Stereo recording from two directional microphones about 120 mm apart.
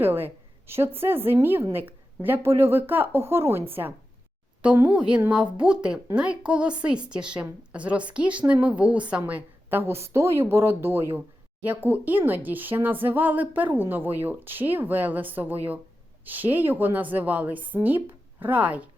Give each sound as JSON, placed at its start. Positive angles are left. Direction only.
{"t": 0.0, "sound": "a woman's voice", "side_deg": -15}